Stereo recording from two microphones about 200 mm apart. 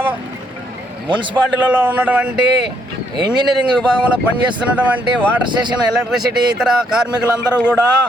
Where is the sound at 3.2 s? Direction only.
20° right (ahead or behind).